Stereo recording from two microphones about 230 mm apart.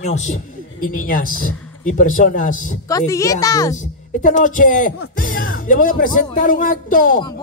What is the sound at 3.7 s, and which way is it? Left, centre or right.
A man's voice, left.